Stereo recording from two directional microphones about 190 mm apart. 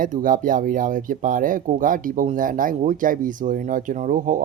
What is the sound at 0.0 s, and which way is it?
Speech, 45° right (ahead or behind).